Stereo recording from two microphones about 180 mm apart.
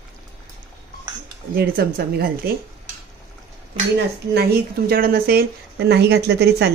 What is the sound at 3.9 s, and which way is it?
Speech, 65° right (ahead or behind).